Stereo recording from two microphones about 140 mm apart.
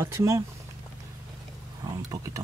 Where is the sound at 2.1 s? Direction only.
25° right (ahead or behind).